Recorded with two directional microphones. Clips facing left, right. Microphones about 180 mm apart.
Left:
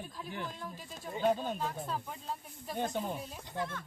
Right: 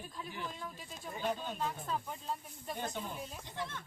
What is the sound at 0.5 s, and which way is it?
Speech, centre (ahead or behind).